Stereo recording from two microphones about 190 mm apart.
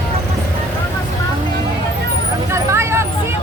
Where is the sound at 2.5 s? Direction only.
15° right (ahead or behind).